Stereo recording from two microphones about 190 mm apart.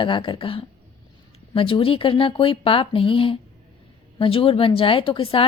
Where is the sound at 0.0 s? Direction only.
25° left (ahead or behind).